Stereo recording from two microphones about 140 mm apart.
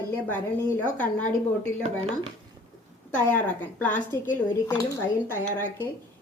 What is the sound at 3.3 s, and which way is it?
Speech, 15° left (ahead or behind).